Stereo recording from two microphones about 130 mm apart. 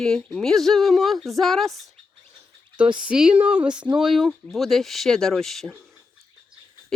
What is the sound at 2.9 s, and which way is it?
Speech, 5° right (ahead or behind).